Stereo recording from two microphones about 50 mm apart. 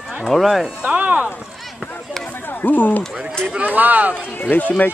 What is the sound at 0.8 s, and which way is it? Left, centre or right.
Speech, right.